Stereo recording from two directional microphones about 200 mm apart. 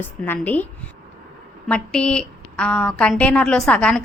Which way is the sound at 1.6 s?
5° left (ahead or behind).